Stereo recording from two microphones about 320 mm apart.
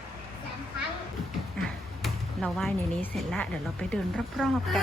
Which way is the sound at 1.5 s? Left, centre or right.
Centre.